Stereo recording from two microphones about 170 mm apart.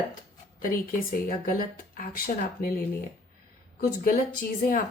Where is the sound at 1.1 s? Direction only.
55° left (ahead or behind).